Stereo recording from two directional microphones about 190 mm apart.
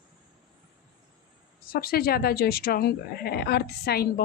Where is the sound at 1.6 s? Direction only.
50° left (ahead or behind).